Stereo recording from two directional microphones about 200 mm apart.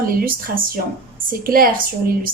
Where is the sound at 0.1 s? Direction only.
45° right (ahead or behind).